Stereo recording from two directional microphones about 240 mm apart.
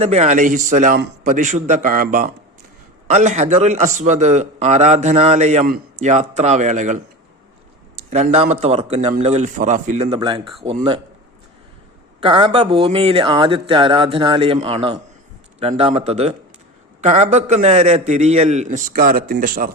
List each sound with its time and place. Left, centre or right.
0.0 s a man's voice: right
8.1 s a man's voice: right
12.2 s a man's voice: right